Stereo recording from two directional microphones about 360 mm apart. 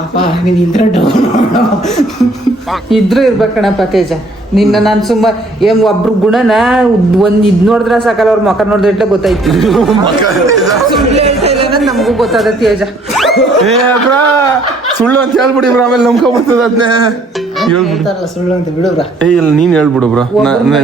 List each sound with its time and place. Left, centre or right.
0.7 s speech: centre
2.9 s a man's voice: centre
10.2 s chatter: centre
11.8 s speech: centre
13.1 s a sound: centre
15.0 s a man's voice: centre
16.8 s music: centre
19.2 s a man's voice: centre